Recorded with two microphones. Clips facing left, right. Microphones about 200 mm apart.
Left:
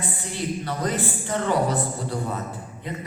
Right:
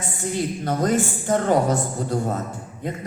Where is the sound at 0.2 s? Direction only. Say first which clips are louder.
Right 7 dB; 45° right (ahead or behind).